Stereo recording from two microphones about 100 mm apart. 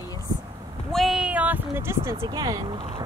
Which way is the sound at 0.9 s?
Centre (ahead or behind).